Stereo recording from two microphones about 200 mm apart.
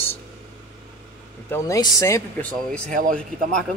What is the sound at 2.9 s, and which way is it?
Speech, 40° right (ahead or behind).